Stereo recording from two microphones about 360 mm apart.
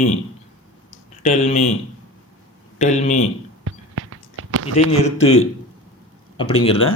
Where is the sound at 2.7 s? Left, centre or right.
Centre.